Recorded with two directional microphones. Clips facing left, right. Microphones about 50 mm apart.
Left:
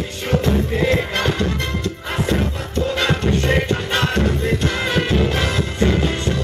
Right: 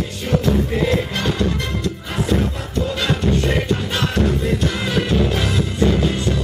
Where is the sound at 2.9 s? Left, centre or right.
Left.